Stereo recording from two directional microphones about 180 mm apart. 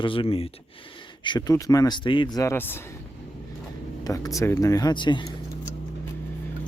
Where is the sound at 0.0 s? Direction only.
30° left (ahead or behind); by 2.7 s 15° left (ahead or behind).